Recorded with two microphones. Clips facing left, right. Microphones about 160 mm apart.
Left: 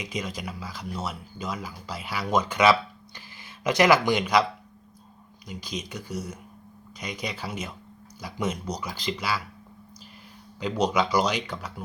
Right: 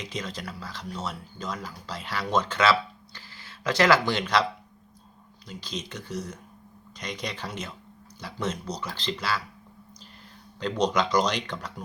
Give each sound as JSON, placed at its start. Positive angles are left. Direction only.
{"t": 0.0, "sound": "speech", "side_deg": 10}
{"t": 5.5, "sound": "speech", "side_deg": 10}
{"t": 10.6, "sound": "speech", "side_deg": 10}